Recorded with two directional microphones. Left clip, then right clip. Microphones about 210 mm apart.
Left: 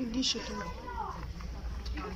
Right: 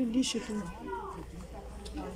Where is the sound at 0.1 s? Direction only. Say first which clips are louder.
Even; 50° right (ahead or behind).